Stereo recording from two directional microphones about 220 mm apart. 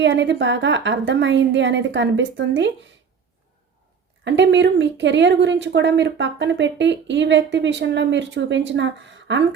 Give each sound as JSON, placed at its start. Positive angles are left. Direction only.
{"t": 0.0, "sound": "speech", "side_deg": -55}
{"t": 4.2, "sound": "speech", "side_deg": -55}